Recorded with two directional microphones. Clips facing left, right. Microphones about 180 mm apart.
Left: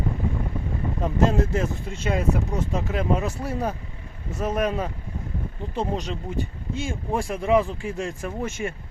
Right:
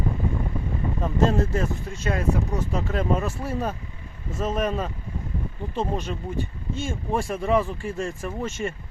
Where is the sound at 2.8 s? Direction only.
15° left (ahead or behind).